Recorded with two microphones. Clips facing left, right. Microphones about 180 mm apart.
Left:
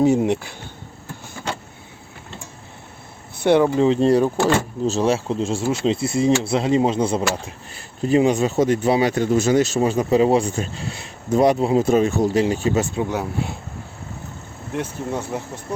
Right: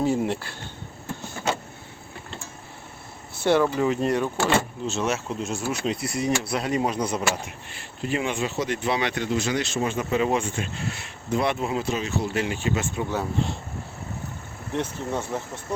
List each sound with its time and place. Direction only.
0.0 s speech: 20° left (ahead or behind)
3.4 s speech: 20° left (ahead or behind); by 11.9 s 35° left (ahead or behind)
11.9 s speech: 50° left (ahead or behind)
13.0 s speech: 15° left (ahead or behind)
14.7 s speech: 10° left (ahead or behind)